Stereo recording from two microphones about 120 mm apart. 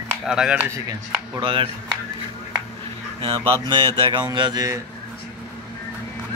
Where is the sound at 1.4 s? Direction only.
45° right (ahead or behind).